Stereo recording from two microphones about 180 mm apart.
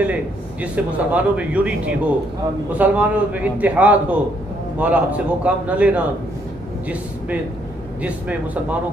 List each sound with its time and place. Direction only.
0.0 s a man's voice: 10° right (ahead or behind)
8.0 s a man's voice: 10° right (ahead or behind)